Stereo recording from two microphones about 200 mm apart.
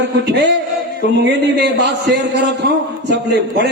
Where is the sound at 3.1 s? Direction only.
60° right (ahead or behind).